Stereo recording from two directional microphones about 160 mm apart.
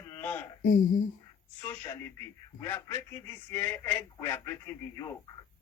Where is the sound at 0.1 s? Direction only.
15° left (ahead or behind).